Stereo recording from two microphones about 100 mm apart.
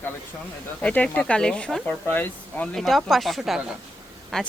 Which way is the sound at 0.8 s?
15° left (ahead or behind).